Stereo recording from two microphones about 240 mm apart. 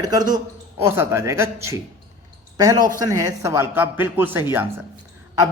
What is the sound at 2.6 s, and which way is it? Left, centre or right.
Speech, centre.